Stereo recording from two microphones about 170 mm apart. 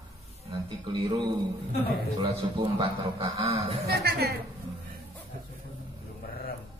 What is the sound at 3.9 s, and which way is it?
Speech, 70° right (ahead or behind).